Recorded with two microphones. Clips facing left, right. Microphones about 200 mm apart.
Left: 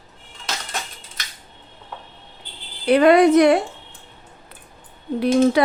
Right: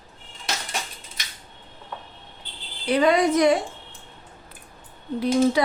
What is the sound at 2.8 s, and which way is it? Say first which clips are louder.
Speech: left 6 dB; 60° left (ahead or behind).